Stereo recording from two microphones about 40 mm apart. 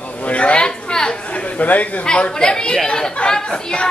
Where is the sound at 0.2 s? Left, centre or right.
Left.